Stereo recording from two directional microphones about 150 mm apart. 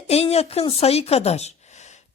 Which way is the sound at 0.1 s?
45° left (ahead or behind).